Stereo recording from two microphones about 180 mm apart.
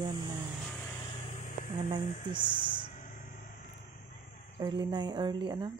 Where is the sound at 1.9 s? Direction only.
25° right (ahead or behind).